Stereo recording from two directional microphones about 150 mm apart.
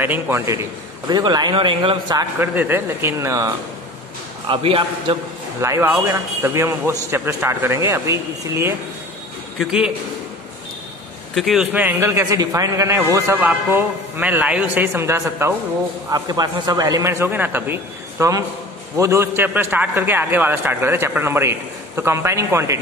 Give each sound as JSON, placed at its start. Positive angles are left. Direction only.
{"t": 0.0, "sound": "a man's voice", "side_deg": -15}
{"t": 1.0, "sound": "speech", "side_deg": -30}
{"t": 2.3, "sound": "a man's voice", "side_deg": -15}
{"t": 4.5, "sound": "speech", "side_deg": -35}
{"t": 5.6, "sound": "a man's voice", "side_deg": -15}
{"t": 9.6, "sound": "a man's voice", "side_deg": -5}
{"t": 11.3, "sound": "a man's voice", "side_deg": 0}
{"t": 11.7, "sound": "a man's voice", "side_deg": -15}